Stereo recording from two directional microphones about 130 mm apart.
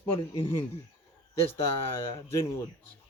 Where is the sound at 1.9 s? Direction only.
20° left (ahead or behind).